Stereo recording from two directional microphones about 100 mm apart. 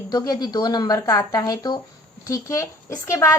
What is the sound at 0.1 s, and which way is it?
Speech, 45° left (ahead or behind).